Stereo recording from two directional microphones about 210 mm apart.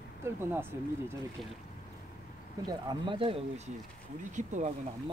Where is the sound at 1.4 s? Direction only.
Centre (ahead or behind).